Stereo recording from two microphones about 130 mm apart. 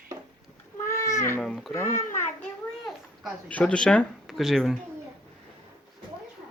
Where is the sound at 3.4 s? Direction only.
10° left (ahead or behind).